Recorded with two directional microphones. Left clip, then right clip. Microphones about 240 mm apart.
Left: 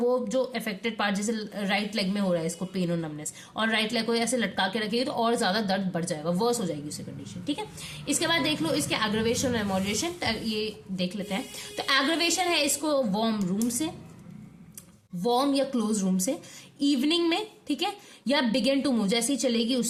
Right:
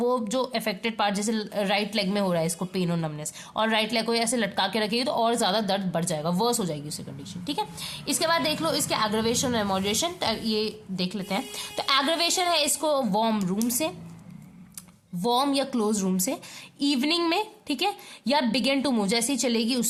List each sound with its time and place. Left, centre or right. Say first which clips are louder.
0.0 s a woman's voice: even; right
15.2 s a woman's voice: right 1 dB; right